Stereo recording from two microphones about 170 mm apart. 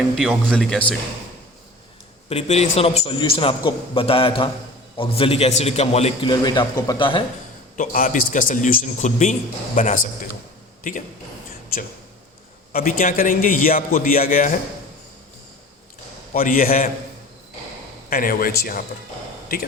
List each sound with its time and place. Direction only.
0.2 s speech: centre (ahead or behind)
2.3 s a man's voice: 40° left (ahead or behind)
6.4 s speech: 25° left (ahead or behind)
7.8 s a man's voice: 50° left (ahead or behind)
12.7 s a man's voice: 55° left (ahead or behind)
16.3 s a man's voice: 55° left (ahead or behind)
18.1 s a man's voice: 55° left (ahead or behind)